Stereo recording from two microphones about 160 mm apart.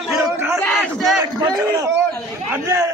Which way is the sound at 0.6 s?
Centre (ahead or behind).